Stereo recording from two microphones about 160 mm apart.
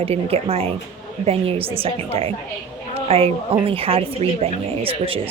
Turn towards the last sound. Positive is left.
turn(degrees=-35)  # may be behind; listen again after turning